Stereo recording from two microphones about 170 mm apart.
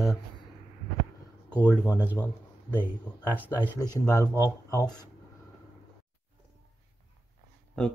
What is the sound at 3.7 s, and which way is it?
Speech, 20° left (ahead or behind).